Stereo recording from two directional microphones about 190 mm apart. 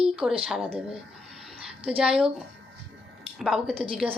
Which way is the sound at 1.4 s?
5° right (ahead or behind).